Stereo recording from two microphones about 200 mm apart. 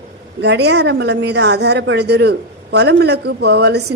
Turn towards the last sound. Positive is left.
turn(degrees=-55)  # may be behind; listen again after turning